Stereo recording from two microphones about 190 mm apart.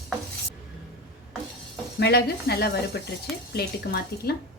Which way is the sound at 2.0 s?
55° left (ahead or behind).